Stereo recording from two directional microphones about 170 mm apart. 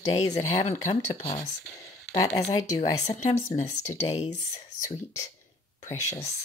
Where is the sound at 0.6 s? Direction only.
45° left (ahead or behind).